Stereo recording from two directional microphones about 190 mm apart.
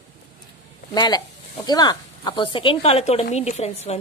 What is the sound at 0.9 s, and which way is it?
Speech, 20° left (ahead or behind).